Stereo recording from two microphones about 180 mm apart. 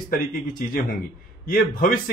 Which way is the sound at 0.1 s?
50° left (ahead or behind).